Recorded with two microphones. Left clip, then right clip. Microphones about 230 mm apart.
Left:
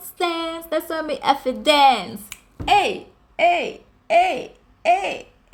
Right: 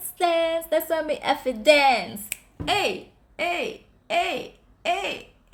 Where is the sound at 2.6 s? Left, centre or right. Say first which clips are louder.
Left 6 dB; centre.